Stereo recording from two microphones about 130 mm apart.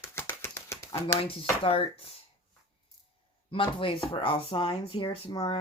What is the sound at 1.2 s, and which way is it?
Speech, 45° left (ahead or behind).